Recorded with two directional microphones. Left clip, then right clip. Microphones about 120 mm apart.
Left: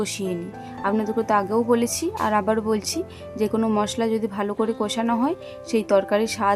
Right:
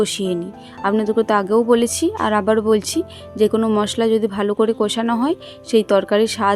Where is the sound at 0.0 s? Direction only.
35° right (ahead or behind).